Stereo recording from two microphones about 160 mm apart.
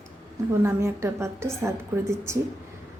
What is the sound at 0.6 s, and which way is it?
A woman's voice, 20° right (ahead or behind).